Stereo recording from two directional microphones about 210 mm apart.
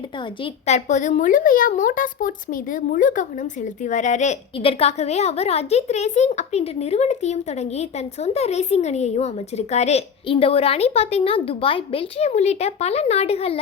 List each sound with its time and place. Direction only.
0.4 s a woman's voice: 30° left (ahead or behind)